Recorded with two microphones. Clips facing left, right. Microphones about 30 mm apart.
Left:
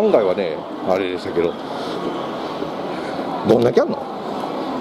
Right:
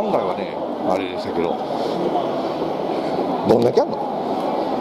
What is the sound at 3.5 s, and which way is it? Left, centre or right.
Speech, left.